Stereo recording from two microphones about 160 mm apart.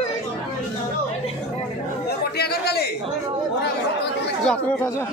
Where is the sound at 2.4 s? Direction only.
80° left.